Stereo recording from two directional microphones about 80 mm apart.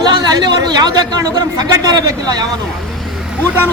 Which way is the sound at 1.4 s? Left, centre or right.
Right.